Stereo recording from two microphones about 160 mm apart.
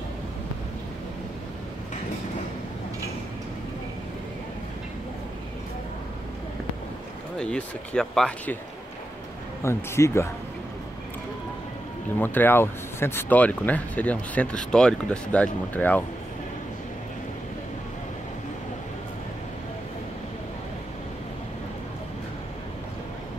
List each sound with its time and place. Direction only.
7.3 s speech: 5° left (ahead or behind)
9.6 s speech: 15° left (ahead or behind)
12.2 s speech: 10° left (ahead or behind)